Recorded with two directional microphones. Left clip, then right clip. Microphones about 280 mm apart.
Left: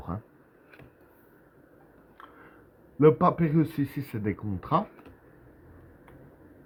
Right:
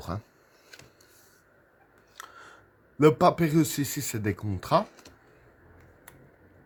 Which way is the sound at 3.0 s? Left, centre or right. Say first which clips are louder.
Right 1 dB; right.